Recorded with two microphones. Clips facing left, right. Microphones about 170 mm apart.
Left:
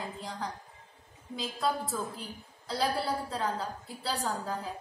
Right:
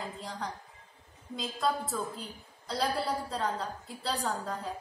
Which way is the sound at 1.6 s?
Centre (ahead or behind).